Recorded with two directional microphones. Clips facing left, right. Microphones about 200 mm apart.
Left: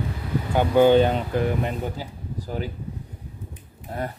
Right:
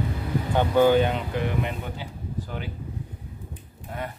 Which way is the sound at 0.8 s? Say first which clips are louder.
Left 4 dB; 30° left (ahead or behind).